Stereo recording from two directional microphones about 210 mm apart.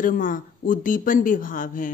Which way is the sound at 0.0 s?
40° left (ahead or behind).